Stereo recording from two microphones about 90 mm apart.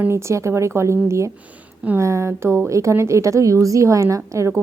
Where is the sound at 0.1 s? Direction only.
30° right (ahead or behind).